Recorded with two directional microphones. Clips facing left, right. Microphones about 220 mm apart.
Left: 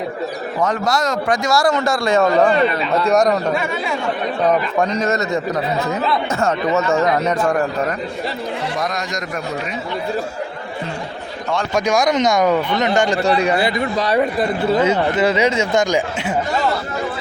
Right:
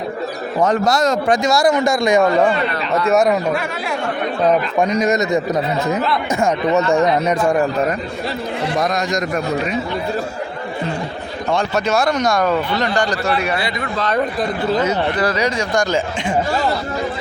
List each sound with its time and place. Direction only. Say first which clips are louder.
0.7 s a man's voice: right 5 dB; 25° right (ahead or behind); by 3.9 s centre (ahead or behind)
4.8 s a man's voice: right 2 dB; 15° right (ahead or behind)
7.0 s a man's voice: right 1 dB; 10° right (ahead or behind)
11.7 s a man's voice: left 4 dB; 15° left (ahead or behind)
13.9 s speech: right 2 dB; 10° left (ahead or behind)
14.8 s a man's voice: left 2 dB; 25° left (ahead or behind)